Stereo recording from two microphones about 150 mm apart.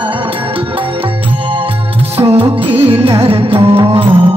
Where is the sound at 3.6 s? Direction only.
20° right (ahead or behind).